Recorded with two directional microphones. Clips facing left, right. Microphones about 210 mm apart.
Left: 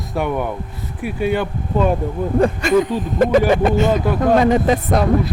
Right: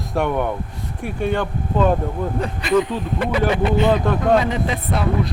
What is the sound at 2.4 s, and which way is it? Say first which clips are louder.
Speech: left 4 dB; 45° left (ahead or behind).